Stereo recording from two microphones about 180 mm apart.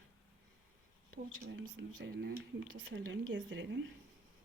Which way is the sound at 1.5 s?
90° right.